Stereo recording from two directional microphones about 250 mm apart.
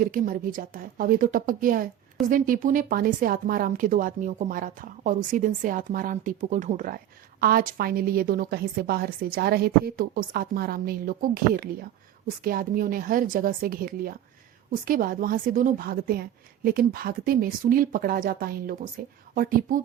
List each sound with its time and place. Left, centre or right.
0.0 s a woman's voice: right